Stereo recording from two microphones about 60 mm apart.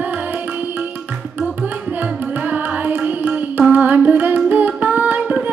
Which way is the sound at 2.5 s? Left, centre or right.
Right.